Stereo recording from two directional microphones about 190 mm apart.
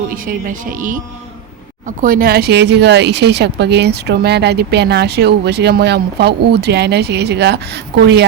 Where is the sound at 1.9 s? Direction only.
45° right (ahead or behind).